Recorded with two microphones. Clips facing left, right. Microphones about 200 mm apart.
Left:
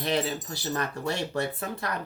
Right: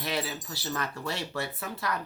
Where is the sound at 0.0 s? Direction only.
20° left (ahead or behind).